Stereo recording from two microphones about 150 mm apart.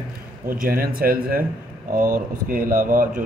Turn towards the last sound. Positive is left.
turn(degrees=-65)  # may be behind; listen again after turning